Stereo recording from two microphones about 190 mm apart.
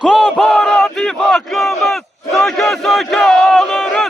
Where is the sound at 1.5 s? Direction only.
Centre (ahead or behind).